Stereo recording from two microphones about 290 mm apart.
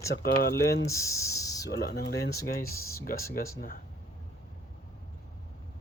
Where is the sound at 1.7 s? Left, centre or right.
Left.